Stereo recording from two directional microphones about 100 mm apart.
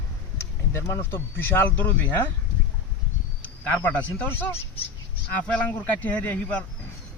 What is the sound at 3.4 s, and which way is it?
Speech, 15° left (ahead or behind).